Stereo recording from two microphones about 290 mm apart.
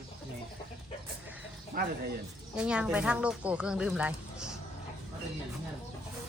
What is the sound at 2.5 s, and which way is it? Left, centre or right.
Speech, centre.